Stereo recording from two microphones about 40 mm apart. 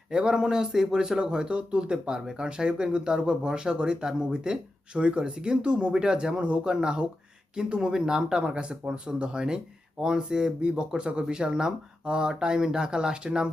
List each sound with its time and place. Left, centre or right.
0.1 s speech: right